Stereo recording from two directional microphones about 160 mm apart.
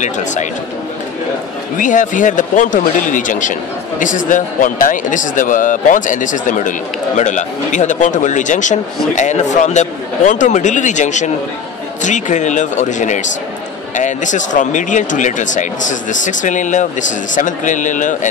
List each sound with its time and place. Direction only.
0.0 s speech: 50° left (ahead or behind)
1.8 s speech: 55° left (ahead or behind)